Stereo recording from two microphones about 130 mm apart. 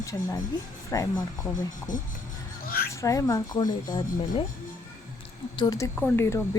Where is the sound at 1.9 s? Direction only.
75° left (ahead or behind).